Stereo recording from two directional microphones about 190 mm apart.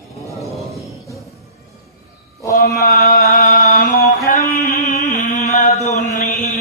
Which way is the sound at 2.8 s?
45° left (ahead or behind).